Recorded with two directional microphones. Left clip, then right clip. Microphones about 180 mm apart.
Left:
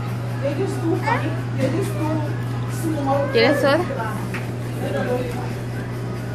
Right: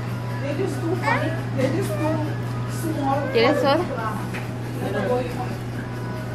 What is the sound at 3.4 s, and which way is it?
Speech, 10° left (ahead or behind).